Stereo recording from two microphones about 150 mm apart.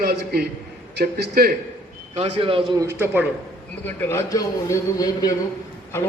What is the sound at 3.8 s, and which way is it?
A man's voice, 15° left (ahead or behind).